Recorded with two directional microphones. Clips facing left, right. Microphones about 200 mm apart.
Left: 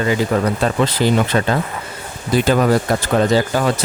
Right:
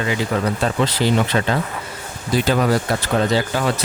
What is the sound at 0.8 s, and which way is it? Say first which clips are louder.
Speech: left 2 dB; 50° left (ahead or behind).